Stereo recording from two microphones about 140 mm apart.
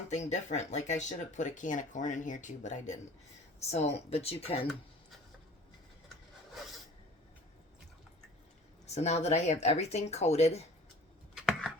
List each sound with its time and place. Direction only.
0.1 s speech: 55° left (ahead or behind)
9.0 s speech: 50° left (ahead or behind)
11.3 s a sound: centre (ahead or behind)